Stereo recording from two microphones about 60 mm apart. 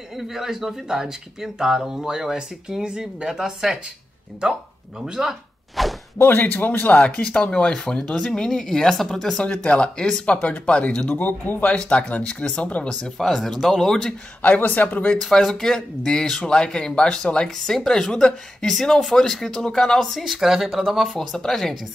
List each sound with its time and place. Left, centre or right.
0.1 s speech: centre
5.0 s speech: centre
5.8 s whip: centre
6.1 s speech: left
7.1 s speech: centre
11.1 s speech: left
11.7 s speech: centre
13.0 s speech: centre
14.4 s speech: left
15.1 s speech: centre